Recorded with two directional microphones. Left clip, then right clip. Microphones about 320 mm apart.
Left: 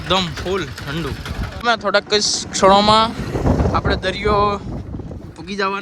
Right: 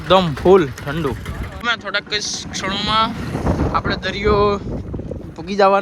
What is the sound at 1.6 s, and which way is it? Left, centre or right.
Speech, centre.